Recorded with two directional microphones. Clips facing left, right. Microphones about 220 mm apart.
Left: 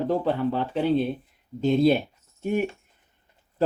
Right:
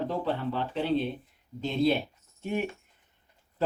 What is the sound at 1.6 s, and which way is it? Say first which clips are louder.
Speech: left 6 dB; 45° left (ahead or behind).